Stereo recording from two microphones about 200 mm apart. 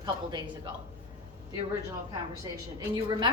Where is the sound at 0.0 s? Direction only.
20° right (ahead or behind).